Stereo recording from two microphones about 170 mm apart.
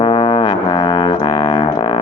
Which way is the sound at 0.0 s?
25° left (ahead or behind).